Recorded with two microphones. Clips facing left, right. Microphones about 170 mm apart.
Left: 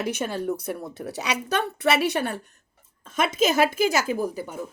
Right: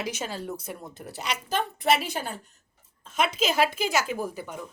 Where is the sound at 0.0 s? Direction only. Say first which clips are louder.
Left 6 dB; 55° left (ahead or behind).